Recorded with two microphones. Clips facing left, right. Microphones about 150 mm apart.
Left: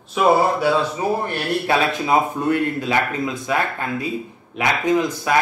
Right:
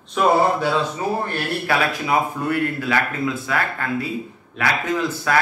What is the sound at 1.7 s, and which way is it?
Speech, 20° left (ahead or behind).